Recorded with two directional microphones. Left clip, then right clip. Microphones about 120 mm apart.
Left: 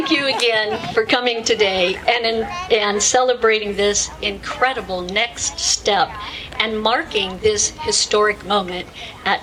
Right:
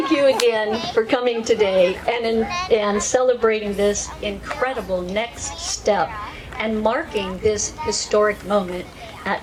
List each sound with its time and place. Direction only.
0.1 s a woman's voice: 25° left (ahead or behind)